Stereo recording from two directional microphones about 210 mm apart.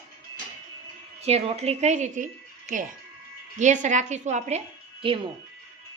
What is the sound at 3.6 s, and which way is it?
A woman's voice, 35° right (ahead or behind).